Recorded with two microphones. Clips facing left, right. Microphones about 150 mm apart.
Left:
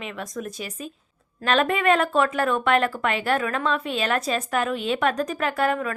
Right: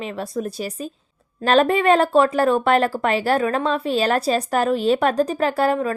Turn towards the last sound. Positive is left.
turn(degrees=-30)  # may be behind; listen again after turning